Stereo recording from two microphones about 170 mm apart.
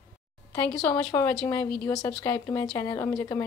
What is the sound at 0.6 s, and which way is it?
Speech, 5° left (ahead or behind).